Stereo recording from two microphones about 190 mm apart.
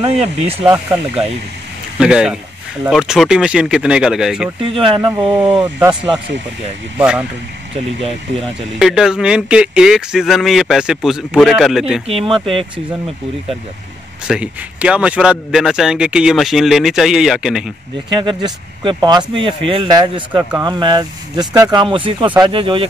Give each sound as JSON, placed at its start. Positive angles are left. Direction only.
{"t": 0.0, "sound": "speech", "side_deg": -30}
{"t": 2.0, "sound": "speech", "side_deg": -5}
{"t": 4.6, "sound": "speech", "side_deg": -30}
{"t": 7.0, "sound": "speech", "side_deg": -5}
{"t": 8.4, "sound": "speech", "side_deg": 0}
{"t": 12.1, "sound": "speech", "side_deg": -25}
{"t": 12.7, "sound": "speech", "side_deg": 0}
{"t": 18.4, "sound": "speech", "side_deg": -20}